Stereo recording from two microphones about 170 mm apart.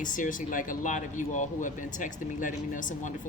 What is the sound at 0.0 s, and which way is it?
A woman's voice, 50° left (ahead or behind).